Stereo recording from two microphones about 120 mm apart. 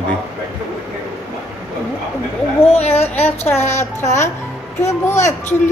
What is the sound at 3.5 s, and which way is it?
A child's voice, 70° left (ahead or behind).